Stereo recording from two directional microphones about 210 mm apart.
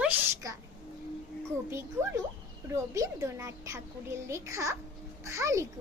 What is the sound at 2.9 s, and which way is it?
A child's voice, 15° right (ahead or behind).